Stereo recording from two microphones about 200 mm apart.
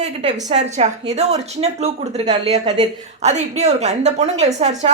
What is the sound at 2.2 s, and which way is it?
Speech, 20° right (ahead or behind).